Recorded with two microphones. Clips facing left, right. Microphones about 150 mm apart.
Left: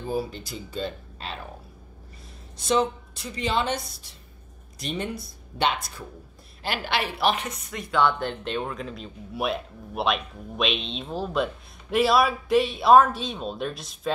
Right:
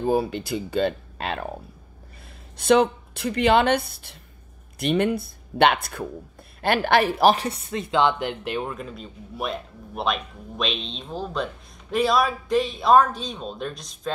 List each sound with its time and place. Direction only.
0.0 s a woman's voice: 65° right (ahead or behind)
2.5 s a woman's voice: 60° right (ahead or behind); by 14.1 s 5° left (ahead or behind)